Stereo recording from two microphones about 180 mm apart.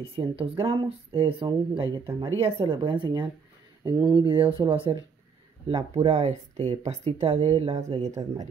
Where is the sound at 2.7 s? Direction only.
30° right (ahead or behind).